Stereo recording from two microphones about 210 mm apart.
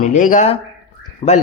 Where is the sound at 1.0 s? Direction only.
25° left (ahead or behind).